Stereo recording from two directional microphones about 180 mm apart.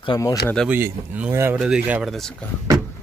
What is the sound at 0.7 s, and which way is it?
Speech, 10° right (ahead or behind).